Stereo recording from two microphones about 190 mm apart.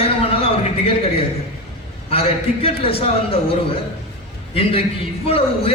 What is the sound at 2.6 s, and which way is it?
A man's voice, 30° left (ahead or behind).